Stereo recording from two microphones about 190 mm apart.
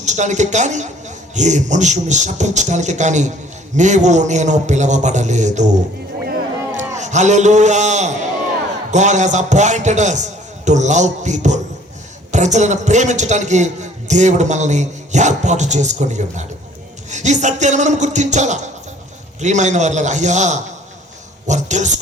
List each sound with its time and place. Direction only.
0.0 s a man's voice: 40° right (ahead or behind)
6.7 s a man's voice: 40° right (ahead or behind)